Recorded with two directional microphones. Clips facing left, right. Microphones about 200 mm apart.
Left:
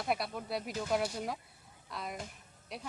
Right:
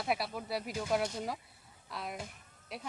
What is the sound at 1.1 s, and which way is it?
Speech, 5° left (ahead or behind).